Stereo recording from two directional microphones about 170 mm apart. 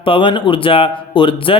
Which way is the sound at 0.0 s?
30° left (ahead or behind).